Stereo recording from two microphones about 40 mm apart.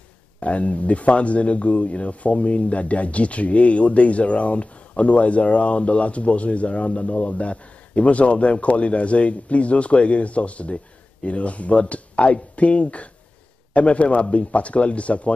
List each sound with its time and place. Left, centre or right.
0.4 s speech: left